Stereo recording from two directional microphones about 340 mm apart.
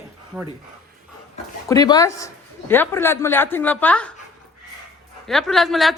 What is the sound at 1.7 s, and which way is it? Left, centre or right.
Speech, centre.